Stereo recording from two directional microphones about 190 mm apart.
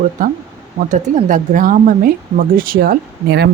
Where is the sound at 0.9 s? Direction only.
40° right (ahead or behind); by 3.5 s 55° right (ahead or behind).